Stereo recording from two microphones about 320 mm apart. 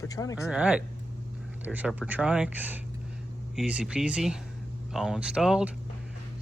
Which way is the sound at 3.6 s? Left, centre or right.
Centre.